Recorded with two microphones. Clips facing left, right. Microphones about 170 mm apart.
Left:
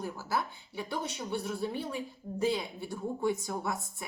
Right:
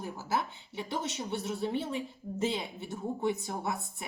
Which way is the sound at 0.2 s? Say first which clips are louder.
Right 4 dB; 20° right (ahead or behind).